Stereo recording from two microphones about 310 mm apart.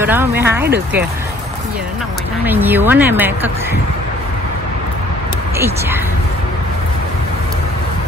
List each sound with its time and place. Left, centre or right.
0.0 s a woman's voice: centre
0.7 s speech: right
2.4 s a woman's voice: centre